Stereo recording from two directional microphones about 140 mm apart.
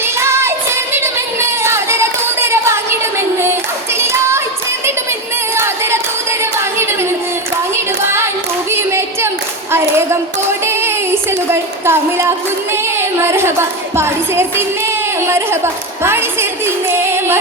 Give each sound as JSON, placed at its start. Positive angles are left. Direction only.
{"t": 0.2, "sound": "music", "side_deg": -20}
{"t": 3.9, "sound": "clapping", "side_deg": -20}
{"t": 5.5, "sound": "music", "side_deg": -20}
{"t": 8.0, "sound": "singing", "side_deg": -20}
{"t": 8.7, "sound": "a sound", "side_deg": -20}
{"t": 9.7, "sound": "clapping", "side_deg": -20}
{"t": 10.7, "sound": "a sound", "side_deg": -15}
{"t": 12.7, "sound": "a woman's voice", "side_deg": -15}